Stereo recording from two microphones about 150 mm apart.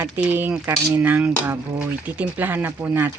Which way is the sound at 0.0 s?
10° right (ahead or behind).